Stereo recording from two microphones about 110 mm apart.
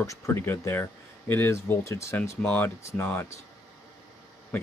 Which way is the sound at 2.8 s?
25° left (ahead or behind).